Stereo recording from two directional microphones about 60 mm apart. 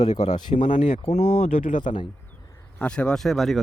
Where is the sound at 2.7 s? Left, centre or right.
Centre.